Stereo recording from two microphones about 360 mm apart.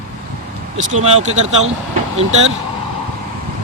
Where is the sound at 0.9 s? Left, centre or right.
Centre.